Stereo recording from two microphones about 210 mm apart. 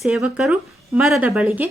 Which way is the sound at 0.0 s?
5° right (ahead or behind).